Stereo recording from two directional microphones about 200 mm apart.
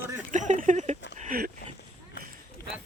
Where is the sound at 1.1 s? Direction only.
40° right (ahead or behind).